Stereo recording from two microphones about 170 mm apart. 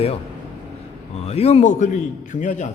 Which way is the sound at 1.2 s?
40° left (ahead or behind).